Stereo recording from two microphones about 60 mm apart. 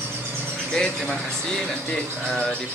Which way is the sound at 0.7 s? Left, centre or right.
Centre.